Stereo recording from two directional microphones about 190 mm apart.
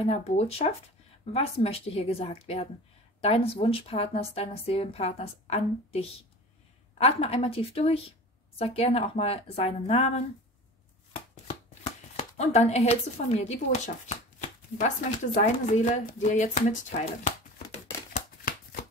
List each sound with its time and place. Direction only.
0.0 s a woman's voice: 35° left (ahead or behind)
11.4 s shuffling cards: 35° left (ahead or behind)
13.4 s a woman's voice: 35° left (ahead or behind)